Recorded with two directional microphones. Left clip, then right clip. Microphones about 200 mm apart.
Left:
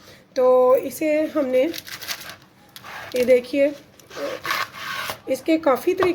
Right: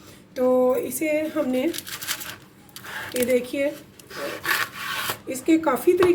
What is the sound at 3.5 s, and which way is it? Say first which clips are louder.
Speech: left 6 dB; 50° left (ahead or behind).